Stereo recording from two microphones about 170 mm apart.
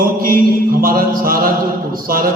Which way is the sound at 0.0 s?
55° right (ahead or behind).